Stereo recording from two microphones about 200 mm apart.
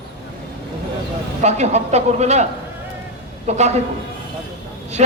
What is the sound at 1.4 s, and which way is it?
A man's voice, 35° right (ahead or behind).